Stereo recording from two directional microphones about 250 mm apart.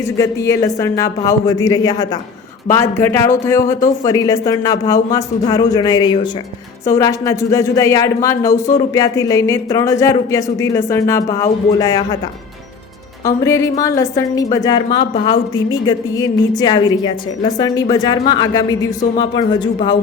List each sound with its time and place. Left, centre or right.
0.0 s speech: centre
13.2 s speech: centre